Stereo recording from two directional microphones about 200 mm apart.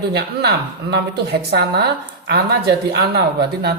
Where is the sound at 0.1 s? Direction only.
55° right (ahead or behind).